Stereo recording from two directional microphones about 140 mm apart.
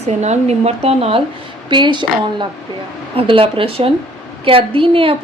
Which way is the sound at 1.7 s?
35° right (ahead or behind).